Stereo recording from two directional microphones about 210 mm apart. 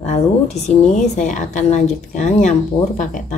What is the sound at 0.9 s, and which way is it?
Speech, 35° left (ahead or behind).